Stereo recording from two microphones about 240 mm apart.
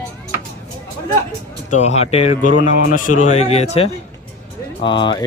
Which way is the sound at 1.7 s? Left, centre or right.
Left.